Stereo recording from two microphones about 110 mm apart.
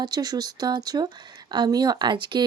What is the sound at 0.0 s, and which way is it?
Speech, 35° right (ahead or behind).